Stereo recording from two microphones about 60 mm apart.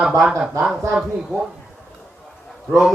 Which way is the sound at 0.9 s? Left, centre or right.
Centre.